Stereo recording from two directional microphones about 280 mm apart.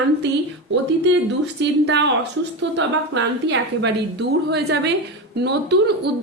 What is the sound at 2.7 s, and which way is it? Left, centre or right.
A woman's voice, right.